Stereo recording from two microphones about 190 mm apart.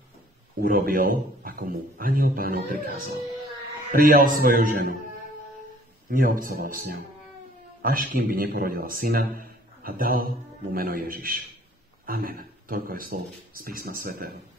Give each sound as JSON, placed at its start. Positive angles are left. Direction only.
{"t": 0.6, "sound": "a man's voice", "side_deg": -50}
{"t": 6.0, "sound": "a man's voice", "side_deg": -45}